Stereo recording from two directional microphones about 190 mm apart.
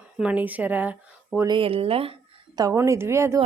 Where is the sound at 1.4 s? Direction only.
25° right (ahead or behind).